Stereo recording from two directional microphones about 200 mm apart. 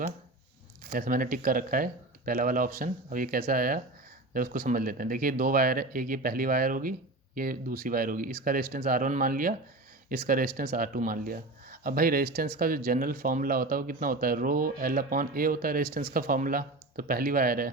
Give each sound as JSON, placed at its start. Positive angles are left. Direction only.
{"t": 0.9, "sound": "speech", "side_deg": -45}